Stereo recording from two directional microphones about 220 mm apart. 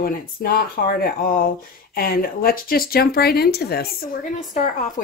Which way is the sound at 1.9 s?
40° left (ahead or behind).